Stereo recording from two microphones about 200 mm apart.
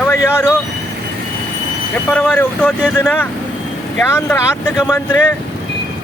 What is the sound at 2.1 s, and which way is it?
Speech, 5° left (ahead or behind).